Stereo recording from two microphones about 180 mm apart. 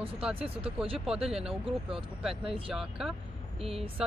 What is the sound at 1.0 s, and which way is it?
Speech, 5° right (ahead or behind).